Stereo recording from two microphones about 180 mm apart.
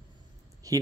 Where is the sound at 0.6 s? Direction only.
20° right (ahead or behind).